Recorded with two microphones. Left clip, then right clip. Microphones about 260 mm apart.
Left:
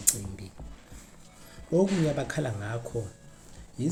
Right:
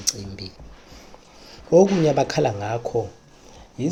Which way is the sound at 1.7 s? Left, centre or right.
Centre.